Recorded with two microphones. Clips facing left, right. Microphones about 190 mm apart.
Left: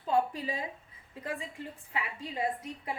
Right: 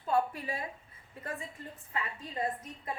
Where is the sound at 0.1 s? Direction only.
20° left (ahead or behind).